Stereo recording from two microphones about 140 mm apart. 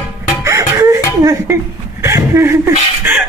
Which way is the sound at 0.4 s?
20° right (ahead or behind).